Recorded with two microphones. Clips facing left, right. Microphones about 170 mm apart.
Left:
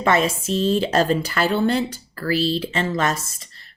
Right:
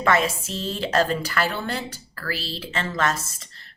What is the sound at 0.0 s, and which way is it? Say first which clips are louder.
Speech: left 2 dB; 20° left (ahead or behind).